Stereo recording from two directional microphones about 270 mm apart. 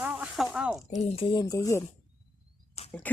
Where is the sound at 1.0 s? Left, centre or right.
Left.